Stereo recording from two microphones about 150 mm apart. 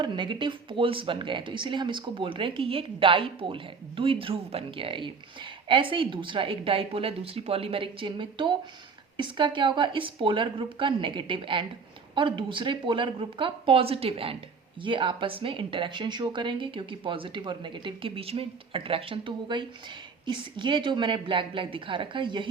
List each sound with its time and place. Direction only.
0.0 s a woman's voice: 30° right (ahead or behind)